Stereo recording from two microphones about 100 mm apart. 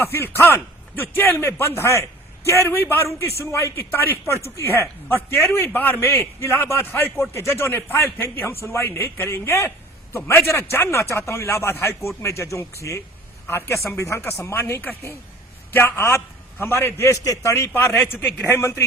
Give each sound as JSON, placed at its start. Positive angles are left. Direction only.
{"t": 0.0, "sound": "a man's voice", "side_deg": 25}